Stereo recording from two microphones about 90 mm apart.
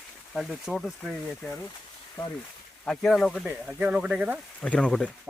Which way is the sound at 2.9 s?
5° left (ahead or behind).